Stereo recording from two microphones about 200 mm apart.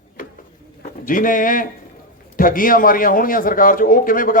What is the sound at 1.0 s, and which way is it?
A man's voice, 40° left (ahead or behind).